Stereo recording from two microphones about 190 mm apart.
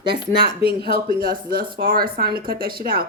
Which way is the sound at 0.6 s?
30° left (ahead or behind).